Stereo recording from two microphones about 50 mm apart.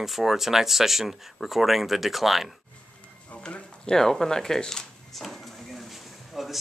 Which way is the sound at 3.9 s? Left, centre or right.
Centre.